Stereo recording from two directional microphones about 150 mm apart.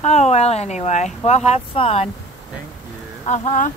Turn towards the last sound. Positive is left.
turn(degrees=55)  # may be behind; listen again after turning